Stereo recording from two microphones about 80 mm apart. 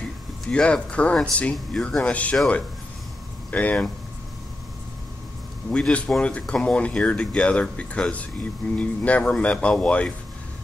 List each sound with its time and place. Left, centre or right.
0.5 s speech: centre
3.4 s speech: centre
5.7 s speech: centre